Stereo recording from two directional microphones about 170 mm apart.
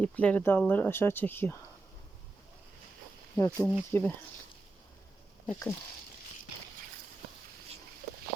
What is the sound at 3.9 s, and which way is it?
Speech, 10° left (ahead or behind).